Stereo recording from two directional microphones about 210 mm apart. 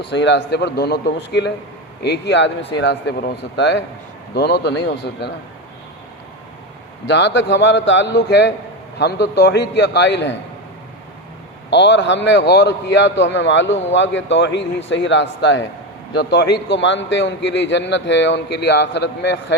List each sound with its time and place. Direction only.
0.0 s a man's voice: 55° left (ahead or behind)
7.1 s a man's voice: 55° left (ahead or behind)
11.7 s a man's voice: 55° left (ahead or behind)